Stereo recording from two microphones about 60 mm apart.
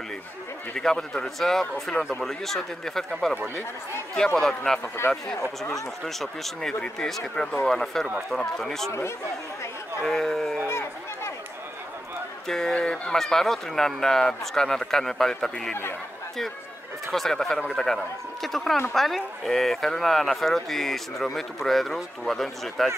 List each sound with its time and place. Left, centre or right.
0.7 s speech: centre
4.4 s speech: centre
6.0 s speech: centre
10.0 s speech: centre
10.7 s a sound: left
12.4 s speech: centre
17.1 s speech: centre